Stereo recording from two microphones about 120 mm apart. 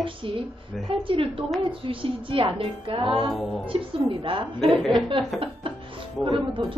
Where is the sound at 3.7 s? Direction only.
45° right (ahead or behind).